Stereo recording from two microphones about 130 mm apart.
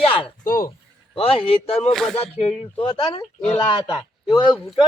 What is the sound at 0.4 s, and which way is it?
Speech, 90° left.